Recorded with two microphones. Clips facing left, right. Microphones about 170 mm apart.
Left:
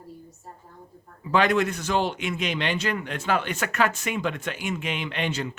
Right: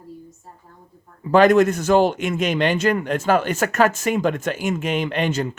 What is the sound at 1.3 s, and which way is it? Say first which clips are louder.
A man's voice: right 8 dB; 45° right (ahead or behind).